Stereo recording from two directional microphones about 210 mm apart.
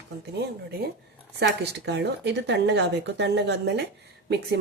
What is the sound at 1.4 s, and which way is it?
Speech, 55° right (ahead or behind).